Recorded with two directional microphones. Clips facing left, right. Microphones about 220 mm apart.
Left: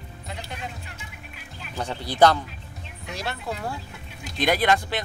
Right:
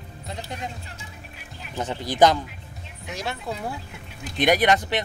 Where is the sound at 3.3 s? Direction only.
Centre (ahead or behind).